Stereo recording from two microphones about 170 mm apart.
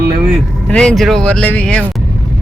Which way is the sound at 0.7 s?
5° left (ahead or behind).